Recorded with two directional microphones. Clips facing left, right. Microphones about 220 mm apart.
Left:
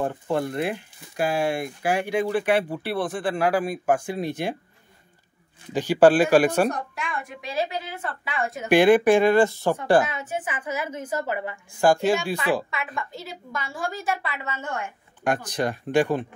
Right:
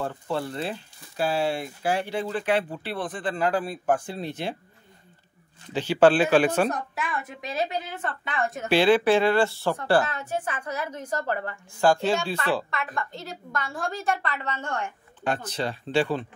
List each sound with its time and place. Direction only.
0.0 s speech: 15° left (ahead or behind)
5.7 s speech: 15° left (ahead or behind)
6.7 s a woman's voice: 5° right (ahead or behind)
8.6 s speech: 15° left (ahead or behind)
10.0 s a woman's voice: centre (ahead or behind)
12.7 s speech: centre (ahead or behind)